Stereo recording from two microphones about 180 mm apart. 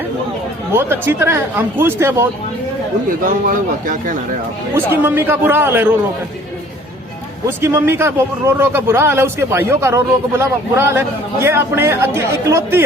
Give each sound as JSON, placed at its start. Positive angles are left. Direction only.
{"t": 0.7, "sound": "a man's voice", "side_deg": -15}
{"t": 3.4, "sound": "speech", "side_deg": -50}
{"t": 4.7, "sound": "a man's voice", "side_deg": -10}
{"t": 7.6, "sound": "a man's voice", "side_deg": -15}